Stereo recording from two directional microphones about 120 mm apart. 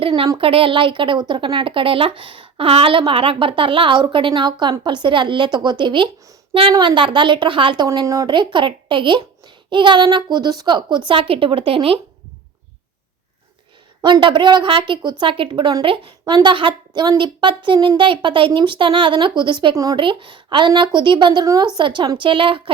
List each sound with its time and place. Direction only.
0.3 s a child's voice: 50° right (ahead or behind)
8.0 s speech: 25° right (ahead or behind)
8.3 s a child's voice: 40° right (ahead or behind)
14.0 s a child's voice: 40° right (ahead or behind)
20.0 s speech: 45° right (ahead or behind)
21.4 s speech: 30° right (ahead or behind)
21.8 s speech: 40° right (ahead or behind)